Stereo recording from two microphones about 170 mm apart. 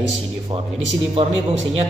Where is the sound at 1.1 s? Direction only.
35° right (ahead or behind).